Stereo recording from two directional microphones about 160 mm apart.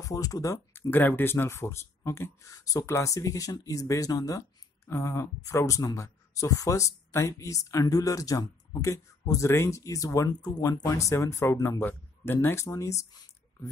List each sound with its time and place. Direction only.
0.0 s speech: 20° left (ahead or behind)